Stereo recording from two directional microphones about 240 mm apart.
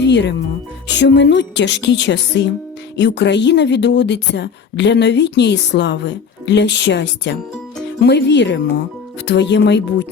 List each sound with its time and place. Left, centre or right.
0.0 s music: left
0.9 s a woman's voice: left